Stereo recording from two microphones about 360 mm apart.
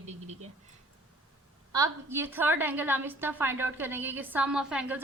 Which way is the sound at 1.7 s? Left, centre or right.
Centre.